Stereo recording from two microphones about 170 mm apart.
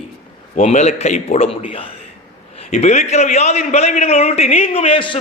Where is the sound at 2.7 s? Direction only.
45° left (ahead or behind).